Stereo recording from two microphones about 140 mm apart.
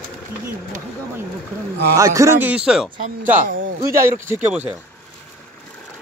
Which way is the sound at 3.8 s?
20° right (ahead or behind).